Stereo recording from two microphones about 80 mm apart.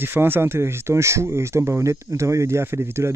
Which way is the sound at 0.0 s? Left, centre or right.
Right.